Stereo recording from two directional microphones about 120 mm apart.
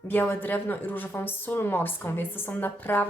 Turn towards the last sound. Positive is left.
turn(degrees=15)  # may be behind; listen again after turning